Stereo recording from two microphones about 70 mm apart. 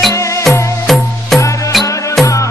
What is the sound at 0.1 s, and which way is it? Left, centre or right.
Music, left.